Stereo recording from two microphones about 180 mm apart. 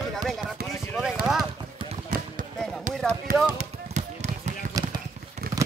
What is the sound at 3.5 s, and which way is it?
Basketball bounce, 40° right (ahead or behind).